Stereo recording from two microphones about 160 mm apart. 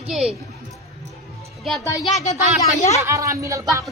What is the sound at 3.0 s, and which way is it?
Speech, 20° right (ahead or behind).